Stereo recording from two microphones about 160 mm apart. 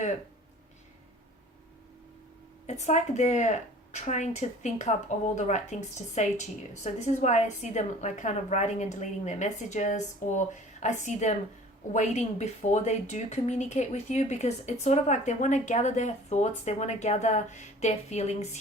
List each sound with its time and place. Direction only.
2.6 s a woman's voice: 45° left (ahead or behind)